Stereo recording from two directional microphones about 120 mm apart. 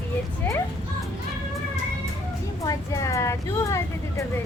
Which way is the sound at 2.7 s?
25° left (ahead or behind).